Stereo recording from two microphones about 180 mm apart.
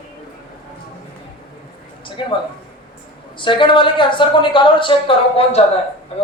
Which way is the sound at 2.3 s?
25° left (ahead or behind).